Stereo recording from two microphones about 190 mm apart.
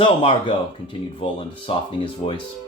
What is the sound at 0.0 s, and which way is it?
Speech, 30° left (ahead or behind).